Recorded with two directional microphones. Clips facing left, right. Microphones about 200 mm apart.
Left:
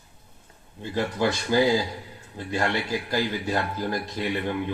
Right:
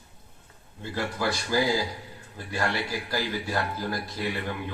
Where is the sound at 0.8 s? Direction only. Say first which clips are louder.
Left 4 dB; 20° left (ahead or behind).